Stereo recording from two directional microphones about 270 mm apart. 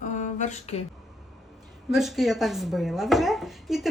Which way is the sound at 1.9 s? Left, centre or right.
Centre.